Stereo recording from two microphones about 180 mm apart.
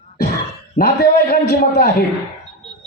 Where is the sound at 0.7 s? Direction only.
55° left (ahead or behind).